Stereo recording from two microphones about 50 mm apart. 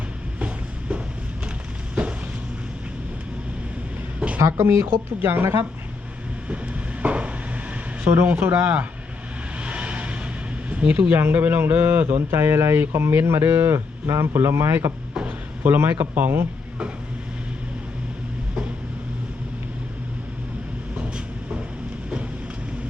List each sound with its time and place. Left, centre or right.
0.3 s vehicle: right
4.4 s speech: right
5.2 s a sound: right
6.5 s vehicle: right
8.0 s speech: right
9.6 s vehicle: right
10.7 s a sound: right
11.1 s speech: right
11.6 s a sound: right
12.7 s speech: right
15.6 s speech: right